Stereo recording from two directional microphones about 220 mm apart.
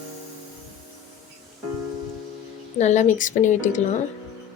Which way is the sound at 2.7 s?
30° left (ahead or behind).